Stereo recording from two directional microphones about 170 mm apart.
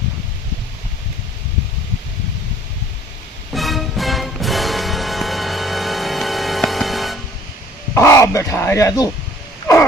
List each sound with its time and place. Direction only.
3.5 s music: centre (ahead or behind)
7.9 s speech: 15° left (ahead or behind)